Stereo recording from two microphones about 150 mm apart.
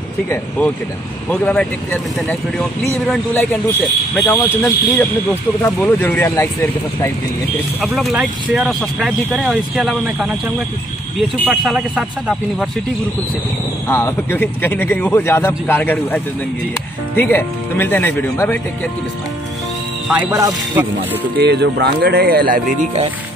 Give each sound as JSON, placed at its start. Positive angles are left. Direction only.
{"t": 0.3, "sound": "a man's voice", "side_deg": 10}
{"t": 7.8, "sound": "a man's voice", "side_deg": 0}
{"t": 11.4, "sound": "a man's voice", "side_deg": -5}
{"t": 13.8, "sound": "speech", "side_deg": 15}
{"t": 20.1, "sound": "speech", "side_deg": -15}
{"t": 21.4, "sound": "speech", "side_deg": -90}